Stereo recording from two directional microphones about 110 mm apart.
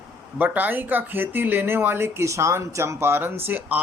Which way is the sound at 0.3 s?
15° right (ahead or behind).